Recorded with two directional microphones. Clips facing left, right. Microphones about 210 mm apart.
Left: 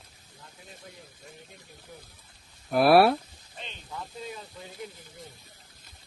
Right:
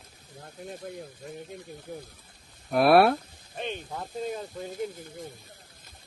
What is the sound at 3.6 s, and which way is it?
Speech, 55° right (ahead or behind).